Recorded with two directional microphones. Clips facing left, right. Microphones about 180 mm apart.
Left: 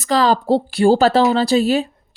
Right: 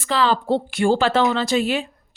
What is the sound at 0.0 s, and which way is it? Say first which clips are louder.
Speech: left 4 dB; 40° left (ahead or behind).